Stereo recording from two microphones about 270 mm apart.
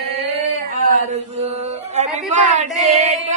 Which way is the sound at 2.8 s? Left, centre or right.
Right.